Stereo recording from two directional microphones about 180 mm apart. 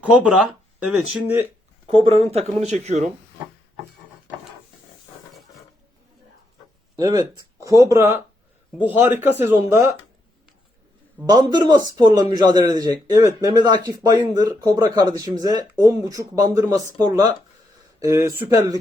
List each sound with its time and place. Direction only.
0.4 s speech: 5° right (ahead or behind)
2.0 s speech: 35° right (ahead or behind)
6.9 s a man's voice: 20° right (ahead or behind)
11.3 s a man's voice: 20° right (ahead or behind)